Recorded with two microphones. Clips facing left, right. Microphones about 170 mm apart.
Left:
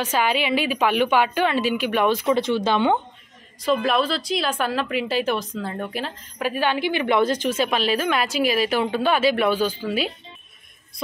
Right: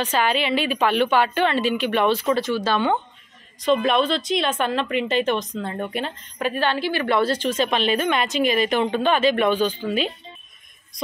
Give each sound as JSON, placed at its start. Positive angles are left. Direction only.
{"t": 0.0, "sound": "a woman's voice", "side_deg": 10}
{"t": 3.8, "sound": "a woman's voice", "side_deg": 0}